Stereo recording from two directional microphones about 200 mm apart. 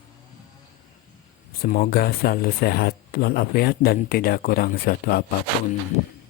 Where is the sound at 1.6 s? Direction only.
45° left (ahead or behind).